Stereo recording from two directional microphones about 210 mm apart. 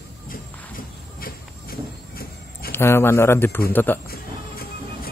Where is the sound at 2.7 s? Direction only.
10° left (ahead or behind).